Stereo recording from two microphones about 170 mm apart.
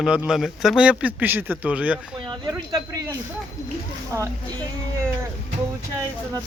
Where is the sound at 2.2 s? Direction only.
25° right (ahead or behind).